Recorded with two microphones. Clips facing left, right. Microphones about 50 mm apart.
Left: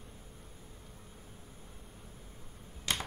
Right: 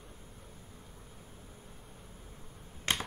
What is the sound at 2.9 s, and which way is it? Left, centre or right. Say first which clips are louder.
Computer keyboard: right 2 dB; right.